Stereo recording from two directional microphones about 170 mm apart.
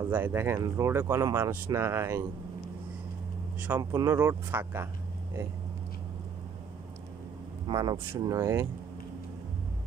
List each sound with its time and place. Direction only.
0.1 s speech: 10° right (ahead or behind)
3.5 s speech: 10° right (ahead or behind)
7.6 s speech: 25° right (ahead or behind)